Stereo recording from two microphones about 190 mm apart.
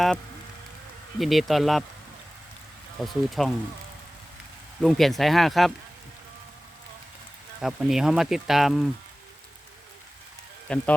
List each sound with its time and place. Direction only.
1.2 s speech: centre (ahead or behind)
3.0 s speech: centre (ahead or behind)
4.8 s speech: centre (ahead or behind)
7.6 s speech: centre (ahead or behind)
10.7 s speech: 5° left (ahead or behind)